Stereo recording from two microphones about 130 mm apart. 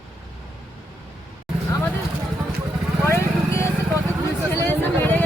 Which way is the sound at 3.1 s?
20° left (ahead or behind).